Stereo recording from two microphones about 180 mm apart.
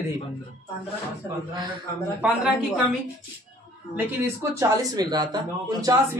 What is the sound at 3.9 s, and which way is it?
Speech, 15° right (ahead or behind).